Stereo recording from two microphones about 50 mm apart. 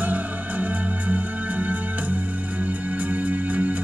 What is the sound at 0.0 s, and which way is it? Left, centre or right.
Music, right.